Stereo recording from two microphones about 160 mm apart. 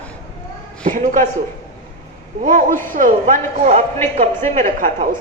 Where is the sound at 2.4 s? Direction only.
55° right (ahead or behind).